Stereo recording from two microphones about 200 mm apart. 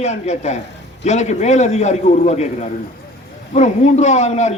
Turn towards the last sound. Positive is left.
turn(degrees=35)  # may be behind; listen again after turning